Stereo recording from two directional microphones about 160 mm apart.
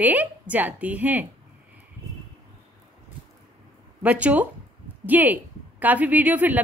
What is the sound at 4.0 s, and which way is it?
A woman's voice, 10° right (ahead or behind).